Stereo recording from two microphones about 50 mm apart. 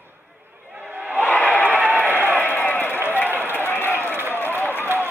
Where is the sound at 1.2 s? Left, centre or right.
Left.